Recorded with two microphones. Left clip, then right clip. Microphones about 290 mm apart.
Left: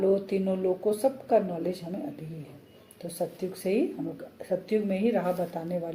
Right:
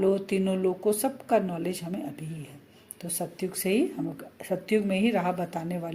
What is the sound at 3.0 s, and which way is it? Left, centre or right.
Speech, right.